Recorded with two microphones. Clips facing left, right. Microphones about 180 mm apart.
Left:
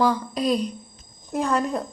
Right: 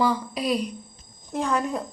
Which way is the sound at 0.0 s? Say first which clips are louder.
Left 2 dB; 5° right (ahead or behind).